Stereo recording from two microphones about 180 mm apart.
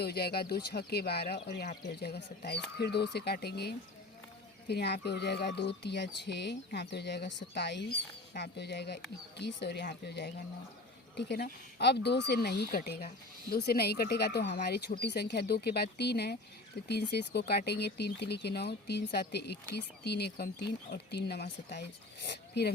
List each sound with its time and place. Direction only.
0.0 s speech: 60° left (ahead or behind)